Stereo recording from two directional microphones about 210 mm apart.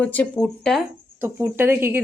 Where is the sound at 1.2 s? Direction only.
10° right (ahead or behind).